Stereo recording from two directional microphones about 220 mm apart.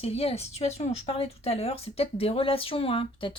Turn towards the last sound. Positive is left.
turn(degrees=25)  # may be behind; listen again after turning